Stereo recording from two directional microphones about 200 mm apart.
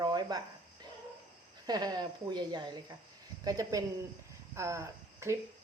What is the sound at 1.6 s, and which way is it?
Speech, 20° right (ahead or behind).